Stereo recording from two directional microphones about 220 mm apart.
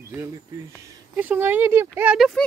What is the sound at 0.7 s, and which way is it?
Speech, 5° right (ahead or behind).